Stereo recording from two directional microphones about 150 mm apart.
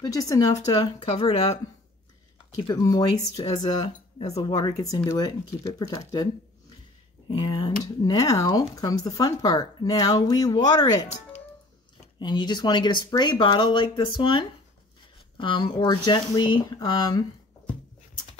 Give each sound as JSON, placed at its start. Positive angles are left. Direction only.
{"t": 0.0, "sound": "speech", "side_deg": 25}
{"t": 0.7, "sound": "speech", "side_deg": 35}
{"t": 1.3, "sound": "speech", "side_deg": 45}
{"t": 2.5, "sound": "speech", "side_deg": 30}
{"t": 4.2, "sound": "speech", "side_deg": 45}
{"t": 4.5, "sound": "speech", "side_deg": 25}
{"t": 7.2, "sound": "speech", "side_deg": 30}
{"t": 12.2, "sound": "speech", "side_deg": 30}